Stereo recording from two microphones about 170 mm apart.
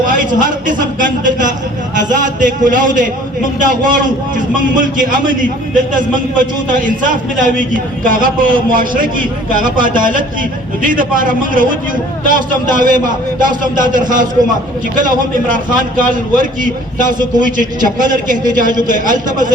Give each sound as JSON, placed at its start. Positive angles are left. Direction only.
{"t": 0.0, "sound": "a man's voice", "side_deg": -50}